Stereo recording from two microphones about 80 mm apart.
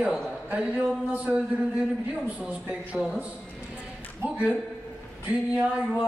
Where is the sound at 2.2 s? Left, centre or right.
Centre.